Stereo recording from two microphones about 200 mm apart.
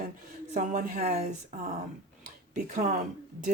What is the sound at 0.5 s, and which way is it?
Speech, 40° right (ahead or behind).